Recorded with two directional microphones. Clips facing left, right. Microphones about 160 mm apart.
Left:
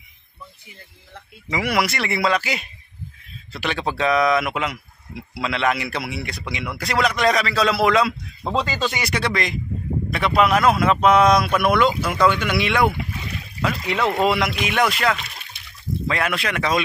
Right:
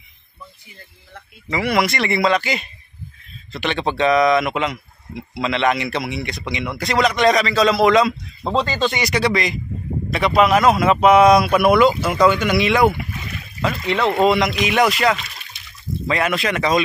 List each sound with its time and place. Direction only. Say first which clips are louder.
1.5 s speech: right 3 dB; 10° left (ahead or behind)
15.1 s a sound: even; 50° left (ahead or behind)
16.1 s speech: right 4 dB; centre (ahead or behind)